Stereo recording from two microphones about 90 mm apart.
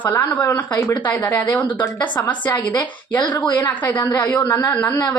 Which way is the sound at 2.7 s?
55° left (ahead or behind).